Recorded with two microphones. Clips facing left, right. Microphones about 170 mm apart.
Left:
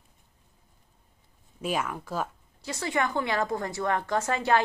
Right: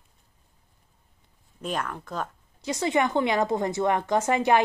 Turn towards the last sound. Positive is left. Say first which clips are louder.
# right 3 dB
turn(degrees=-20)  # may be behind; listen again after turning